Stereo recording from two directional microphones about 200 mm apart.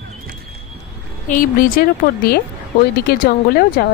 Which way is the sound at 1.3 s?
45° left (ahead or behind).